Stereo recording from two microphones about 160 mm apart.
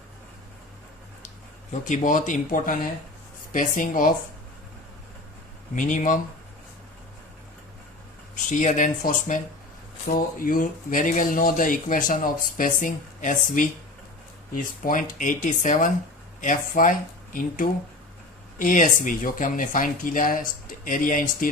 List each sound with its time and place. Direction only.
1.8 s speech: 50° left (ahead or behind)
5.7 s speech: 55° left (ahead or behind)
8.4 s speech: 50° left (ahead or behind)
14.8 s speech: 55° left (ahead or behind)